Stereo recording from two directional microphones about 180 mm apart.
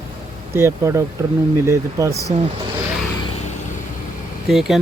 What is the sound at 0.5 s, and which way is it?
Speech, 15° right (ahead or behind).